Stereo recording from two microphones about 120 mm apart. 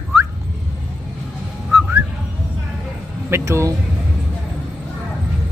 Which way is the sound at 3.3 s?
25° right (ahead or behind).